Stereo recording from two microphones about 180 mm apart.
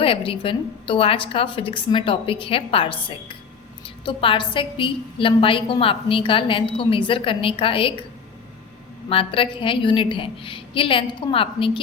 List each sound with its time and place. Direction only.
0.0 s a woman's voice: 30° left (ahead or behind)
9.0 s a woman's voice: 30° left (ahead or behind)